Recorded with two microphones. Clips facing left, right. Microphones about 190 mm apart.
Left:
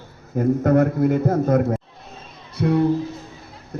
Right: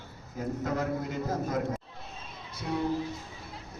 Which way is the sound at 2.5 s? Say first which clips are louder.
Left 14 dB; 65° left (ahead or behind).